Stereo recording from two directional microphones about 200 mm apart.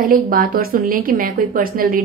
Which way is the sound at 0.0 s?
45° right (ahead or behind).